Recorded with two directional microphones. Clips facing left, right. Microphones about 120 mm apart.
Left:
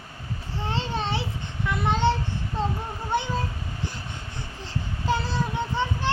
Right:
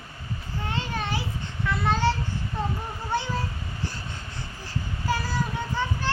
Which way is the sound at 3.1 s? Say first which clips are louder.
Left 2 dB; 20° left (ahead or behind).